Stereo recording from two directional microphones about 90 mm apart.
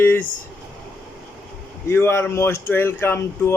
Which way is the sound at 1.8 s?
25° left (ahead or behind).